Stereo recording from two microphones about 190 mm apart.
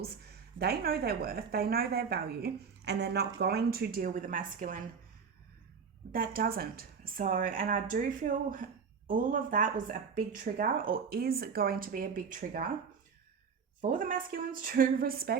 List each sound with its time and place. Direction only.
0.6 s a woman's voice: 55° right (ahead or behind)
6.1 s speech: 50° right (ahead or behind)
13.9 s speech: 45° right (ahead or behind)